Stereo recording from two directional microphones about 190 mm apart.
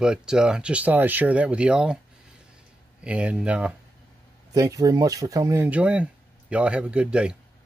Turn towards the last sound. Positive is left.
turn(degrees=-5)  # may be behind; listen again after turning